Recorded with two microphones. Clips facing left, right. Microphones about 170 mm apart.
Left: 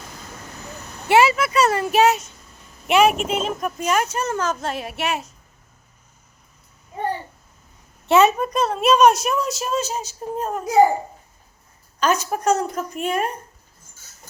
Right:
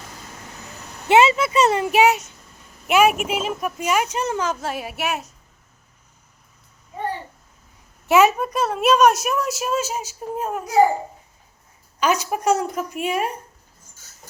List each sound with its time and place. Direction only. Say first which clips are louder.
1.0 s a woman's voice: right 1 dB; 20° right (ahead or behind); by 5.2 s 5° right (ahead or behind)
8.1 s a woman's voice: even; 10° right (ahead or behind)
11.9 s a woman's voice: even; 10° right (ahead or behind)